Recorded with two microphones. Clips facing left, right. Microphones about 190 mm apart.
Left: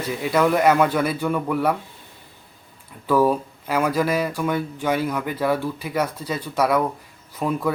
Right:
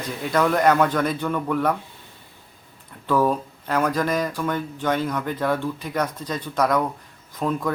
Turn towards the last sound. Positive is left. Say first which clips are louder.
# left 1 dB
turn(degrees=10)  # may be behind; listen again after turning